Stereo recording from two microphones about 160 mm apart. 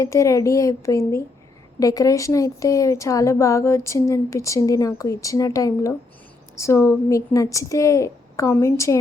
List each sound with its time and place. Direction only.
0.0 s a woman's voice: 20° left (ahead or behind)